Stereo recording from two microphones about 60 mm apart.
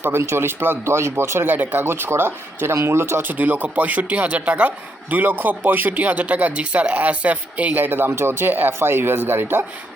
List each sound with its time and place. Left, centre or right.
0.0 s speech: right
1.5 s speech: right
1.8 s speech: right
3.2 s speech: right